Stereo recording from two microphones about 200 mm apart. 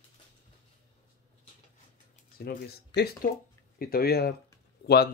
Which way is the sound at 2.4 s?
50° left (ahead or behind).